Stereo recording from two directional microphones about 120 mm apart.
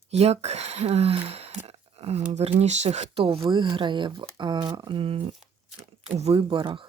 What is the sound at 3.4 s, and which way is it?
Speech, 40° right (ahead or behind).